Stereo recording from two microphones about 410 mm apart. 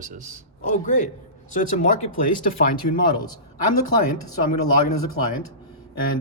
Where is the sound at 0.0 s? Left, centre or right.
Centre.